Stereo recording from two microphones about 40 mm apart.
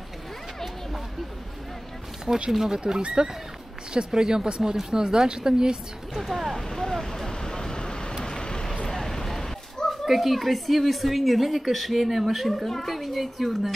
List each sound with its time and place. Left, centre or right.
2.2 s speech: centre
6.1 s a woman's voice: centre
6.5 s vehicle: centre
8.8 s a sound: centre
10.0 s a woman's voice: centre